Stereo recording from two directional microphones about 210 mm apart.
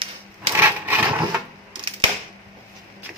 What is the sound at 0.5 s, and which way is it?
Cash register, 10° right (ahead or behind).